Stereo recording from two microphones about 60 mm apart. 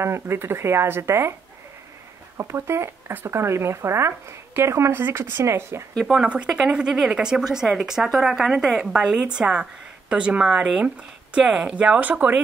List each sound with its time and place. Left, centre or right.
0.0 s speech: right
2.3 s speech: right
6.1 s speech: centre